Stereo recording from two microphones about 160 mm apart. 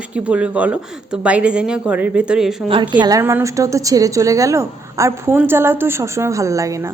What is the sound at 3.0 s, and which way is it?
A woman's voice, 25° right (ahead or behind).